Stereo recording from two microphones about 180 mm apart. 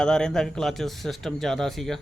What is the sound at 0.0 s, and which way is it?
Speech, 5° left (ahead or behind).